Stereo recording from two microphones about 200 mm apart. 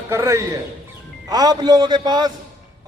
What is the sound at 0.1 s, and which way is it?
A man's voice, 15° right (ahead or behind).